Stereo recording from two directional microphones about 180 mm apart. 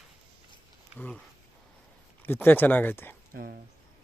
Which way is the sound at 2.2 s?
10° left (ahead or behind).